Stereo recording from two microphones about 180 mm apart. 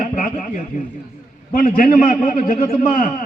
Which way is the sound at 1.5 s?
50° left (ahead or behind).